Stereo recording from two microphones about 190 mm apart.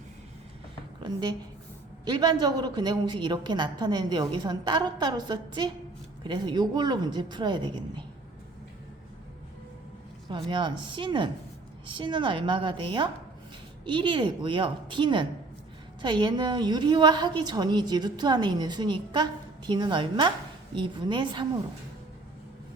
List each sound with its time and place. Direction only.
2.0 s a woman's voice: 20° right (ahead or behind)
10.2 s a woman's voice: 25° right (ahead or behind)